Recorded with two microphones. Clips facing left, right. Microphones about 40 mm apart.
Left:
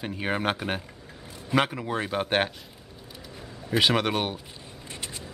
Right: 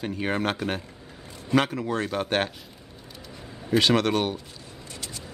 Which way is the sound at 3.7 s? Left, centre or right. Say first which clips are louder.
Right 2 dB; centre.